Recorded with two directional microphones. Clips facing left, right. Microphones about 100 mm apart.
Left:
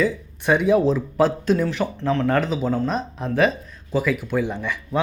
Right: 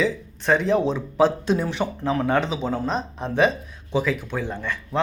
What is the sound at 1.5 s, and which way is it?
Speech, 20° right (ahead or behind).